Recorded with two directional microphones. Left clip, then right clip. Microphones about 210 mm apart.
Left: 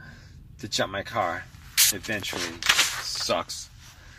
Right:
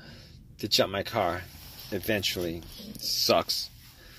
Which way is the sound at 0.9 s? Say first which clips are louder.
Left 1 dB; 35° right (ahead or behind).